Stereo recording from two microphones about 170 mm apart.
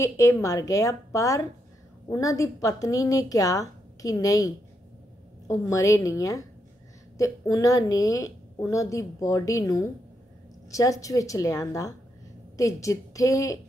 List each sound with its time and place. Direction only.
0.0 s a woman's voice: 20° left (ahead or behind)